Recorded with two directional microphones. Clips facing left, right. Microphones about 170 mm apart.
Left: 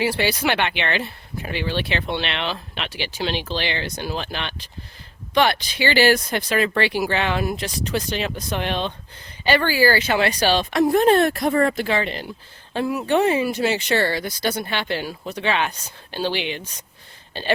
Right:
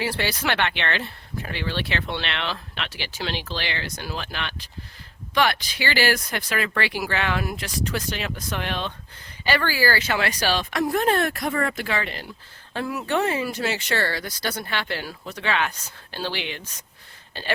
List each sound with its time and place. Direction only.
0.0 s speech: 15° left (ahead or behind)